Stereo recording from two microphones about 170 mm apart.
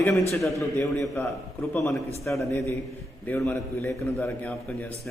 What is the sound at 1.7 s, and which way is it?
A man's voice, 15° left (ahead or behind).